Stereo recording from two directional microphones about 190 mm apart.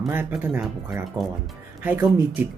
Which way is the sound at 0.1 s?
10° right (ahead or behind).